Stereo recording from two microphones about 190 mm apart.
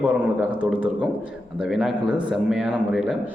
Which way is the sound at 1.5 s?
Centre (ahead or behind).